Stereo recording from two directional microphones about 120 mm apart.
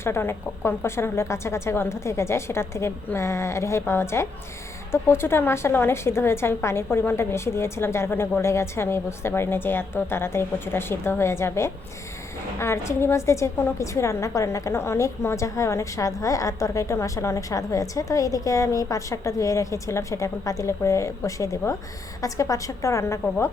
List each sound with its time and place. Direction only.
0.0 s a woman's voice: 20° left (ahead or behind)